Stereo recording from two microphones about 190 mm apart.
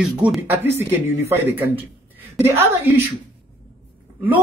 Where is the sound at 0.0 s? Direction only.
5° right (ahead or behind).